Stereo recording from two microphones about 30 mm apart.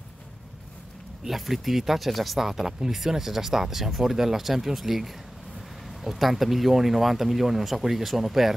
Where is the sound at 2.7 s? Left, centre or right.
Centre.